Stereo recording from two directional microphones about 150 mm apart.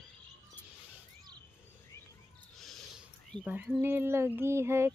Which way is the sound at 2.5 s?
Centre (ahead or behind).